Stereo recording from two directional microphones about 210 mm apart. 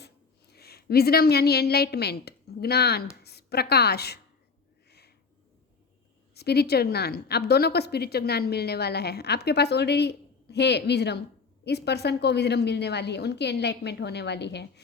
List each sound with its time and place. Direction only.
0.5 s a woman's voice: 50° left (ahead or behind)
4.9 s a sound: 50° left (ahead or behind)
6.3 s a woman's voice: 50° left (ahead or behind)